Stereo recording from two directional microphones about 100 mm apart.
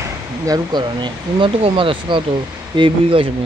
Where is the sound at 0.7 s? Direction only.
50° right (ahead or behind).